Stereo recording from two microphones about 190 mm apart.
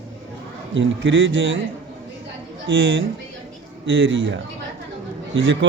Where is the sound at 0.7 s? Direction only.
75° right (ahead or behind).